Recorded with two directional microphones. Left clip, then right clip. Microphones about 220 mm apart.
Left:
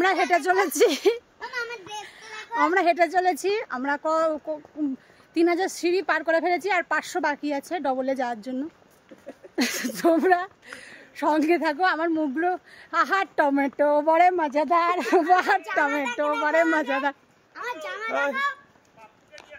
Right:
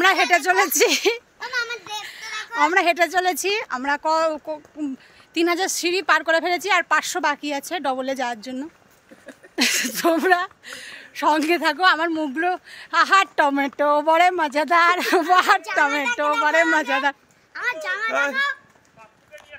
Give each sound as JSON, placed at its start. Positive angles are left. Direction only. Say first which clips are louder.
{"t": 0.3, "sound": "speech", "louder": "right 4 dB", "side_deg": 15}
{"t": 1.4, "sound": "child singing", "louder": "right 6 dB", "side_deg": -15}
{"t": 2.0, "sound": "a sound", "louder": "right 8 dB", "side_deg": 10}
{"t": 2.6, "sound": "speech", "louder": "right 3 dB", "side_deg": 10}
{"t": 17.6, "sound": "a child's voice", "louder": "right 7 dB", "side_deg": -15}